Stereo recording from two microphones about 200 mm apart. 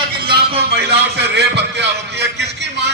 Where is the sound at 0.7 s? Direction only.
55° right (ahead or behind).